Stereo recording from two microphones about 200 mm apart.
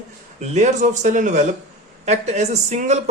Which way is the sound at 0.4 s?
35° right (ahead or behind).